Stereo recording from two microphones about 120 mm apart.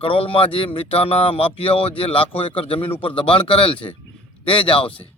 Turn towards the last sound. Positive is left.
turn(degrees=50)  # may be behind; listen again after turning